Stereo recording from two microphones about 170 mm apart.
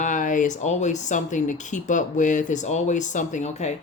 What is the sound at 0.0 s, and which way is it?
Speech, 50° left (ahead or behind).